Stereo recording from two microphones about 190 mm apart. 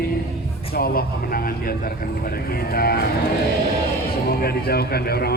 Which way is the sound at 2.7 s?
55° left (ahead or behind).